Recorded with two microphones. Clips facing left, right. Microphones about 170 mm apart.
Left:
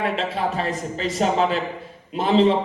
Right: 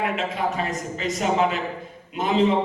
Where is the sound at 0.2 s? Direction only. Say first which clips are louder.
Left 1 dB; 30° left (ahead or behind).